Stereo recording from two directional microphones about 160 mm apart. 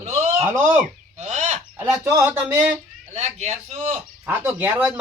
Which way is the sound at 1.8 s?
15° right (ahead or behind).